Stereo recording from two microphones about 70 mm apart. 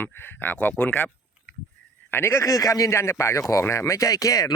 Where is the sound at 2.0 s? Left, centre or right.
Left.